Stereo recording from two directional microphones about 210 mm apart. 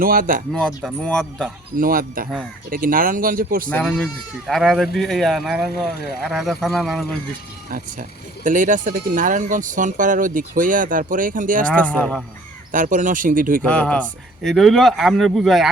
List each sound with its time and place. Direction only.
0.0 s speech: 45° right (ahead or behind)
0.5 s speech: centre (ahead or behind)
1.7 s speech: 40° right (ahead or behind)
3.7 s speech: 5° left (ahead or behind)
8.4 s speech: 40° right (ahead or behind)
11.6 s speech: 5° left (ahead or behind)
12.7 s speech: 40° right (ahead or behind)
13.7 s speech: 5° left (ahead or behind)